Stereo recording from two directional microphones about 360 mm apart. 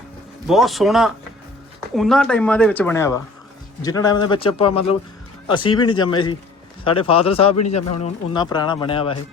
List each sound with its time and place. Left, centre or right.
0.4 s speech: centre